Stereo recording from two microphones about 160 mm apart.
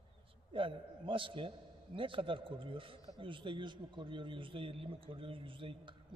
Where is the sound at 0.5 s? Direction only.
30° right (ahead or behind).